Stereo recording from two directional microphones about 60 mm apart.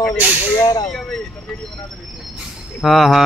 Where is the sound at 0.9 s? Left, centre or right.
Centre.